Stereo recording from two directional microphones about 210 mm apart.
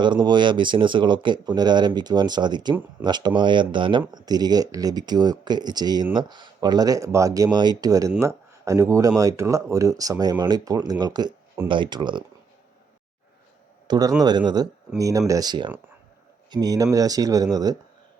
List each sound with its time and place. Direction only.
0.0 s speech: 20° right (ahead or behind)
13.8 s speech: 20° right (ahead or behind)